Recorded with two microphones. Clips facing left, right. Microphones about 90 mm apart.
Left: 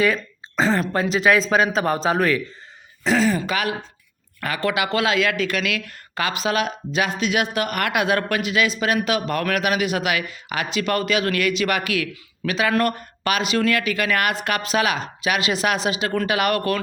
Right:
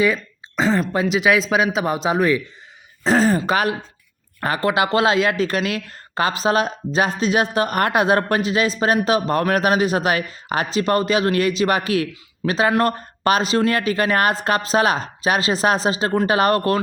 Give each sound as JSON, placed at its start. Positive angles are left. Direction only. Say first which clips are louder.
{"t": 0.0, "sound": "speech", "louder": "right 1 dB", "side_deg": -20}
{"t": 3.0, "sound": "speech", "louder": "right 3 dB", "side_deg": -40}